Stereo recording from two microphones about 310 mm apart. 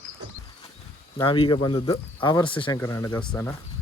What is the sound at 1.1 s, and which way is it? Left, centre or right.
Speech, centre.